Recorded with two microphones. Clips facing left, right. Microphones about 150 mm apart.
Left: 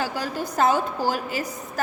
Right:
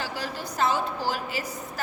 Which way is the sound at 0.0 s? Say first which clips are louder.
Left 5 dB; 45° left (ahead or behind).